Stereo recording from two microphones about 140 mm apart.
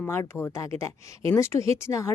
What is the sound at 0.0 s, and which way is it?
A woman's voice, 15° left (ahead or behind).